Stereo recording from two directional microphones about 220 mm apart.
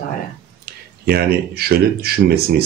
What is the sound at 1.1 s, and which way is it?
Speech, 45° right (ahead or behind).